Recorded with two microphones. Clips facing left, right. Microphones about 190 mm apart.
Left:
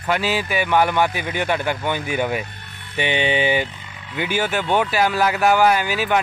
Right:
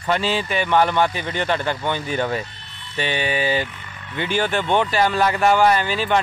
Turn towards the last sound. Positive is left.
turn(degrees=10)  # may be behind; listen again after turning